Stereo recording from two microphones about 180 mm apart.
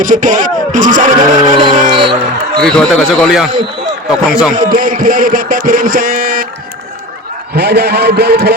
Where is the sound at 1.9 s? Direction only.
25° right (ahead or behind).